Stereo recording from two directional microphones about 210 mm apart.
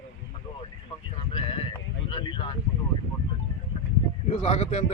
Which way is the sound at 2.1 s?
25° left (ahead or behind).